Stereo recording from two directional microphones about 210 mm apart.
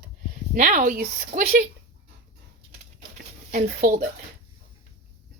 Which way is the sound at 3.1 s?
35° right (ahead or behind).